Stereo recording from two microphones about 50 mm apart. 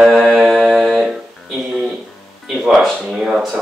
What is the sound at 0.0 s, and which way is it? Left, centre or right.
Mantra, centre.